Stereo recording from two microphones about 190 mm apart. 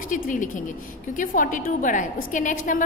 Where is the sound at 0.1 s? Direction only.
45° left (ahead or behind).